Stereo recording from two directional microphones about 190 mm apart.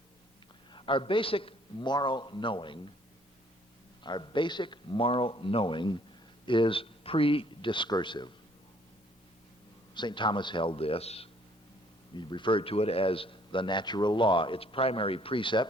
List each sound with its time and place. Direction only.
0.7 s a man's voice: 25° left (ahead or behind)
4.0 s a man's voice: 25° left (ahead or behind)
9.9 s a man's voice: 25° left (ahead or behind)